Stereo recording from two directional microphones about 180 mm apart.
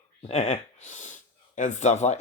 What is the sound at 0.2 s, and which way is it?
Speech, 35° left (ahead or behind).